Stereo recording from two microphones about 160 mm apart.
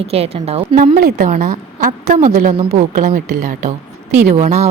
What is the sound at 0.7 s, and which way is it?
A woman's voice, 55° right (ahead or behind).